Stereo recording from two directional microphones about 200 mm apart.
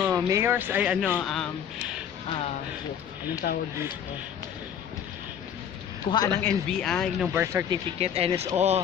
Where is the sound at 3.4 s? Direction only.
55° left (ahead or behind).